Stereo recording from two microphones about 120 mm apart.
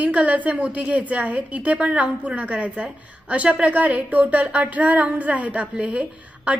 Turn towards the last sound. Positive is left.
turn(degrees=-10)  # may be behind; listen again after turning